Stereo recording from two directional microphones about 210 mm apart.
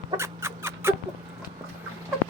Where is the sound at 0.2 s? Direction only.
10° right (ahead or behind).